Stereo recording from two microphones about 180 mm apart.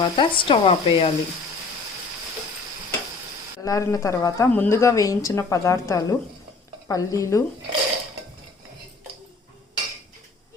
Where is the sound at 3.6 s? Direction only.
15° left (ahead or behind).